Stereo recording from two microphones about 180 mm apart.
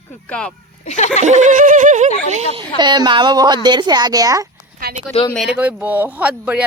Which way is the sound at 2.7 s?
25° right (ahead or behind).